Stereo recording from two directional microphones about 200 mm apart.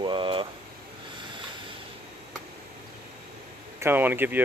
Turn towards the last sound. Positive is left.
turn(degrees=-10)  # may be behind; listen again after turning